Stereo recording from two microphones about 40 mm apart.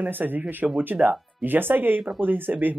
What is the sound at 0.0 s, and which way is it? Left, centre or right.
Speech, right.